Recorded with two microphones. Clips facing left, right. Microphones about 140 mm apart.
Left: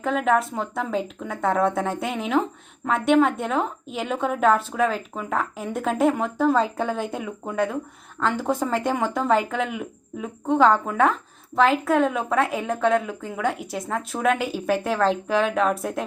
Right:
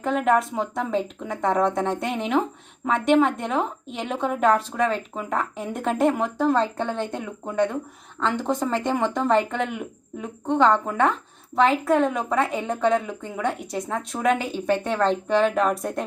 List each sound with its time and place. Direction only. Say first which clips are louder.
0.0 s speech: even; centre (ahead or behind)